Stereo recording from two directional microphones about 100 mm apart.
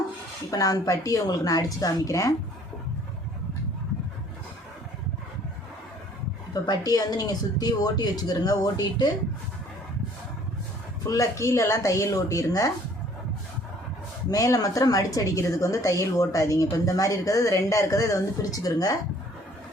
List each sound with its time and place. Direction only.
0.5 s a woman's voice: 35° left (ahead or behind)
6.5 s a woman's voice: 40° left (ahead or behind)
11.0 s a woman's voice: 35° left (ahead or behind)
14.3 s a woman's voice: 35° left (ahead or behind)